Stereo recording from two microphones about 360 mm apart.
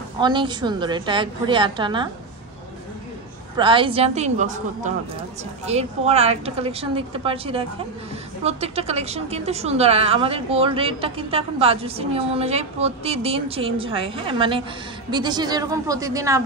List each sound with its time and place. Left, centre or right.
0.2 s a woman's voice: centre
3.5 s a woman's voice: centre